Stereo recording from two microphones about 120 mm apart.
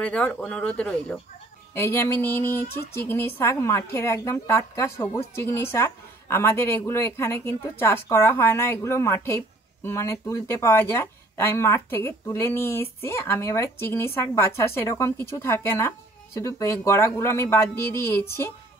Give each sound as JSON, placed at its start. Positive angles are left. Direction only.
{"t": 0.0, "sound": "speech", "side_deg": 10}
{"t": 1.7, "sound": "a woman's voice", "side_deg": 20}